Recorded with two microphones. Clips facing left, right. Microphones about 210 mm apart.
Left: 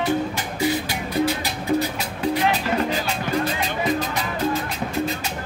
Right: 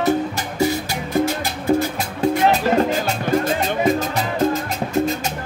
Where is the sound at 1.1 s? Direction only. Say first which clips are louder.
Right 3 dB; 45° right (ahead or behind).